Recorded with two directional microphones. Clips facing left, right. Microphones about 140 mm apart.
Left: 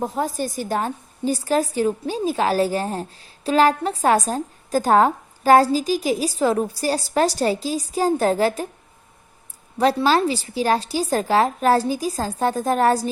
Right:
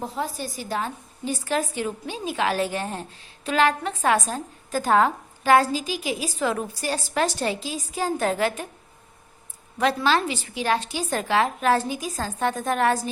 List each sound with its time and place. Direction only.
0.0 s a woman's voice: 45° left (ahead or behind)
9.7 s a woman's voice: 35° left (ahead or behind)